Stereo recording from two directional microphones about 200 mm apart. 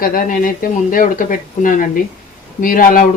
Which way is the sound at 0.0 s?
45° left (ahead or behind).